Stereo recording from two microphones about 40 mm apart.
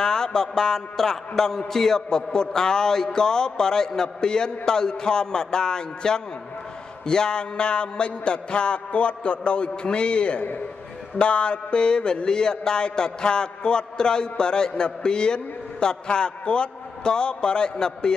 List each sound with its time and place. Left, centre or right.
0.0 s a man's voice: centre